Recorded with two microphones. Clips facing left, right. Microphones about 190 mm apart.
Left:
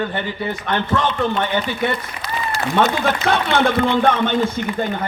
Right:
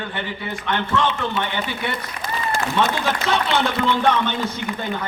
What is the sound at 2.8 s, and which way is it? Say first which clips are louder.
A man's voice: left 5 dB; 60° left (ahead or behind).